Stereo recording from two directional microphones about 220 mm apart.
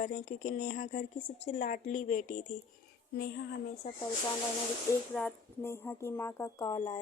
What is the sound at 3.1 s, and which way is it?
Speech, 45° left (ahead or behind).